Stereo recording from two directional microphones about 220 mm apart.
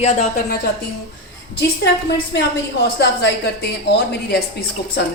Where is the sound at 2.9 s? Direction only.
50° left (ahead or behind).